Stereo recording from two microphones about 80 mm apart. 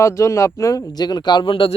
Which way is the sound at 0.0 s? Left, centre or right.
Left.